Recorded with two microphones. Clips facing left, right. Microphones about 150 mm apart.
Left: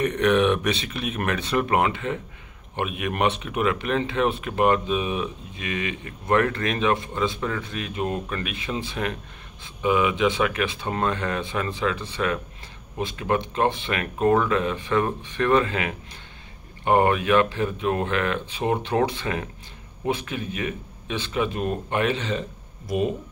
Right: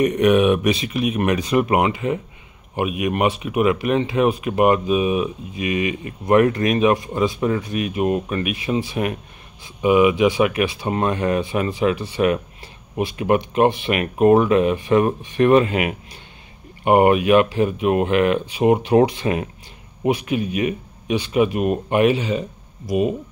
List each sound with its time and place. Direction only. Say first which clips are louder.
0.0 s speech: right 5 dB; 10° right (ahead or behind)